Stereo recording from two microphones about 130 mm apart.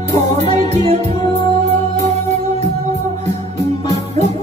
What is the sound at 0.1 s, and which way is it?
Music, 55° right (ahead or behind).